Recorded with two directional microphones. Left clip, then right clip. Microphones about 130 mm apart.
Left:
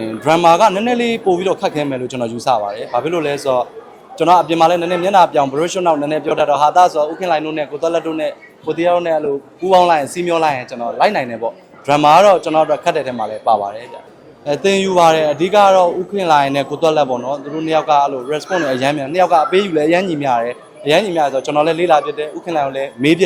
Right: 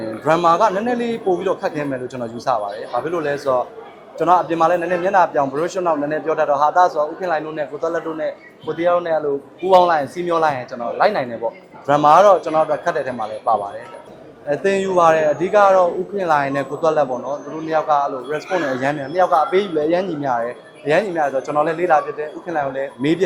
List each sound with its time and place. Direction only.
0.0 s a man's voice: 40° left (ahead or behind)